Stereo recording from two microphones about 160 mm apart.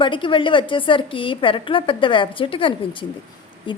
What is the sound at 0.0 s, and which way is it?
Speech, 30° left (ahead or behind).